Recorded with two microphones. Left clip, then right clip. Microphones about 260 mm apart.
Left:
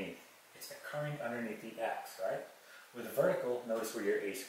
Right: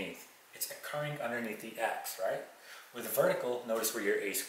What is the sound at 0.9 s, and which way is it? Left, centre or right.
Speech, centre.